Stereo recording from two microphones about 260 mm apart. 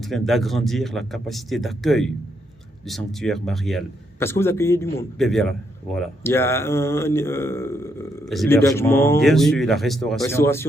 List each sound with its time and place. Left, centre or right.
0.1 s a man's voice: centre